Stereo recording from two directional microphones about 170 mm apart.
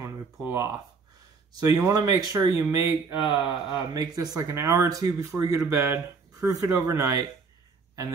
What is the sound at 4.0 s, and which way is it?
Speech, 20° right (ahead or behind).